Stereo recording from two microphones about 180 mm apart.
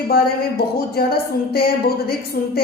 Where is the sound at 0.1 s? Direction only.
60° left (ahead or behind).